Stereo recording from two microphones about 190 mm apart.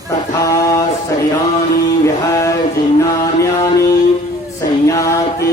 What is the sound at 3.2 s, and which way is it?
Music, 15° left (ahead or behind).